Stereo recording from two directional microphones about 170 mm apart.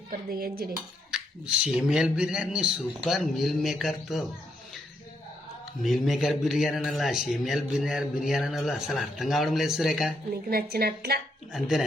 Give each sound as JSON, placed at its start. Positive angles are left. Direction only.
{"t": 0.1, "sound": "a woman's voice", "side_deg": -60}
{"t": 1.1, "sound": "a man's voice", "side_deg": -5}
{"t": 5.8, "sound": "a man's voice", "side_deg": 0}
{"t": 10.5, "sound": "a woman's voice", "side_deg": -65}